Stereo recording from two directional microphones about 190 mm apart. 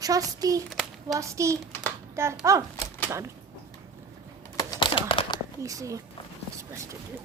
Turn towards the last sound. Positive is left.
turn(degrees=-15)  # may be behind; listen again after turning